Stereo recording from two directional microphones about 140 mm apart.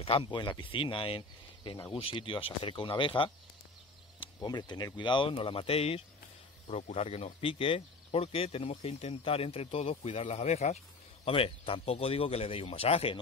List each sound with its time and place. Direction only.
0.0 s speech: 40° left (ahead or behind)
11.2 s speech: 40° left (ahead or behind)